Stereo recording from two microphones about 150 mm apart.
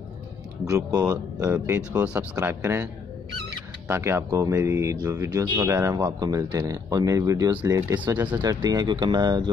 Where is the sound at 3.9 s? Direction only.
15° right (ahead or behind).